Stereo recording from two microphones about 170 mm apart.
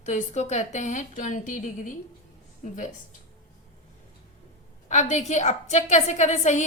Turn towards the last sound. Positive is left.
turn(degrees=45)  # may be behind; listen again after turning